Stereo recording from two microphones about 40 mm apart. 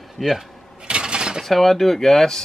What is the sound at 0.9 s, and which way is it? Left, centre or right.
Pulleys, right.